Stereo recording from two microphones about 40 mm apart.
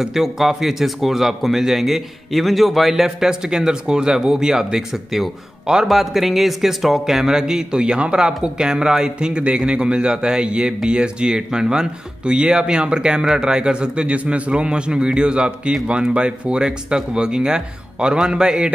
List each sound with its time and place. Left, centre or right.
0.0 s a man's voice: centre
7.8 s a man's voice: right